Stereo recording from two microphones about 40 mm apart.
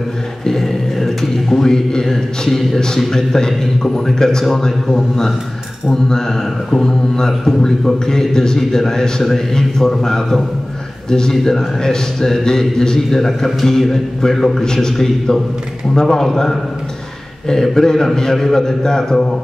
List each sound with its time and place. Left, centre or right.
0.5 s speech: centre